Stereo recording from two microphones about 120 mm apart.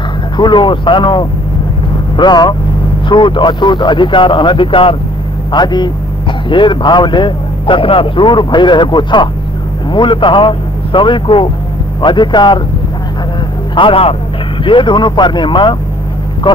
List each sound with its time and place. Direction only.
0.4 s a man's voice: 40° left (ahead or behind)
13.7 s a man's voice: 50° left (ahead or behind)